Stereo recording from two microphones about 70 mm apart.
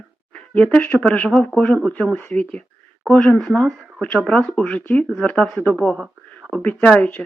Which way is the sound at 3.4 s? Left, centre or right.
Centre.